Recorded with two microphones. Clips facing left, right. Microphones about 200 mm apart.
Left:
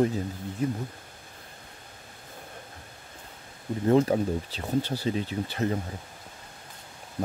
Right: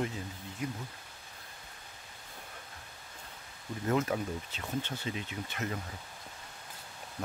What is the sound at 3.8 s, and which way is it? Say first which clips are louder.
Speech: left 9 dB; 30° left (ahead or behind).